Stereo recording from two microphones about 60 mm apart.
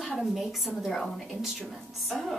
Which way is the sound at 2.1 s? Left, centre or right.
Centre.